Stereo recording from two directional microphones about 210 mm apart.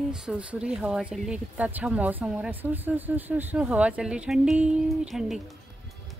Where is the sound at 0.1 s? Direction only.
5° right (ahead or behind).